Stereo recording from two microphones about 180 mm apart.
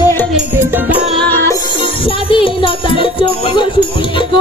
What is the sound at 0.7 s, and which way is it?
Music, 10° right (ahead or behind).